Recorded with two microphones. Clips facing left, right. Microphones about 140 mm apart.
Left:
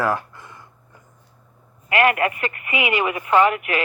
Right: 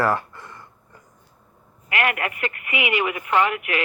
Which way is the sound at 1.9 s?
30° left (ahead or behind).